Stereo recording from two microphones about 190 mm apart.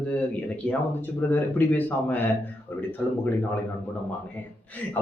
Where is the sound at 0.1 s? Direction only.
5° left (ahead or behind).